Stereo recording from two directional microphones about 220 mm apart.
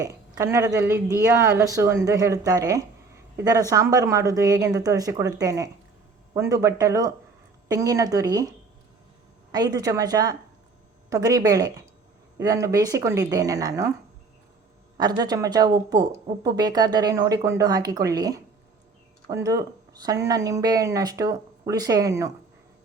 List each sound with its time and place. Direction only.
0.3 s speech: 15° right (ahead or behind)
9.5 s speech: 15° right (ahead or behind)
14.9 s speech: 20° right (ahead or behind)